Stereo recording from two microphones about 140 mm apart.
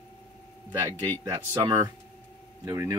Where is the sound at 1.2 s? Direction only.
20° right (ahead or behind).